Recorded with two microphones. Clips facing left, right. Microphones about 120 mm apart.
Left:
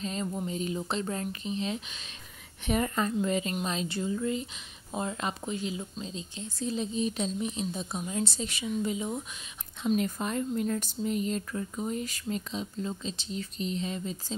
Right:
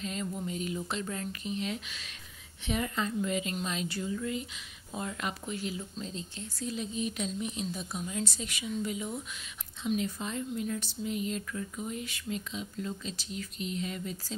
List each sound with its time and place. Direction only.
0.0 s speech: 30° left (ahead or behind)
2.6 s speech: 45° left (ahead or behind); by 9.2 s 25° left (ahead or behind)
9.8 s speech: 50° left (ahead or behind); by 14.1 s 25° left (ahead or behind)